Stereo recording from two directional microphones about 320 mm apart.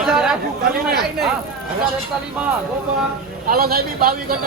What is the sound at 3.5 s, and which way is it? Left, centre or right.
Speech, right.